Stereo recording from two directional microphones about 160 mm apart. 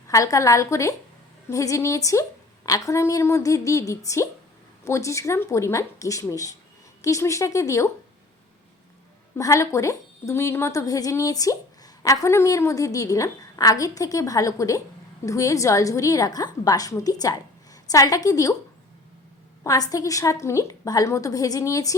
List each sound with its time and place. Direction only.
0.1 s a woman's voice: 20° left (ahead or behind)
9.4 s a woman's voice: 20° left (ahead or behind)
19.9 s a woman's voice: 20° left (ahead or behind)